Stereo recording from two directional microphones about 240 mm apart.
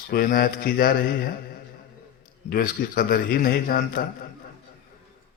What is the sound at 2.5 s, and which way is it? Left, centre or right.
A man's voice, left.